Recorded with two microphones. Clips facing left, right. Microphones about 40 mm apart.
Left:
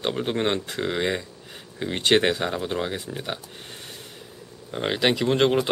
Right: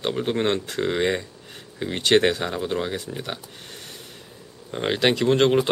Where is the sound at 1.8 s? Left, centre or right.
Centre.